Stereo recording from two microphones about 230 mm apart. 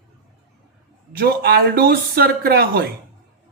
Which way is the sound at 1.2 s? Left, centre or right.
Right.